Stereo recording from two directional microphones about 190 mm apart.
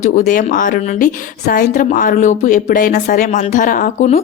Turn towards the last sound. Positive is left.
turn(degrees=35)  # may be behind; listen again after turning